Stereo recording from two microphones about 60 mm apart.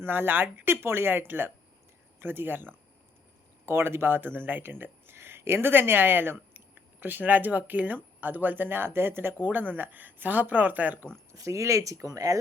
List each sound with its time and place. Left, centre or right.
0.0 s speech: right
11.3 s speech: right